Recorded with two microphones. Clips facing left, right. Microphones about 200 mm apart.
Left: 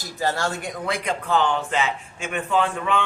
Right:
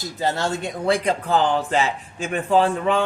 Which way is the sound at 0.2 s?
20° right (ahead or behind).